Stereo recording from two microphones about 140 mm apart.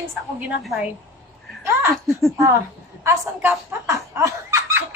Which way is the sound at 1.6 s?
15° right (ahead or behind).